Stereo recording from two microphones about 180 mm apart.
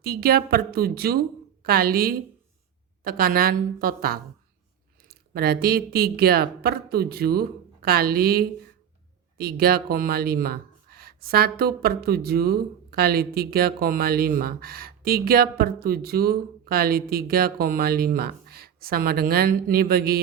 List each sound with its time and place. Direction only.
0.0 s speech: 60° right (ahead or behind)